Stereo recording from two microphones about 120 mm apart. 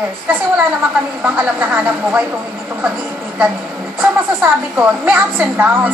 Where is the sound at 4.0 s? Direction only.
15° right (ahead or behind).